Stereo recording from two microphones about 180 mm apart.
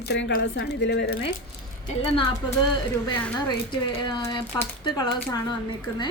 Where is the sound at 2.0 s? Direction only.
30° left (ahead or behind).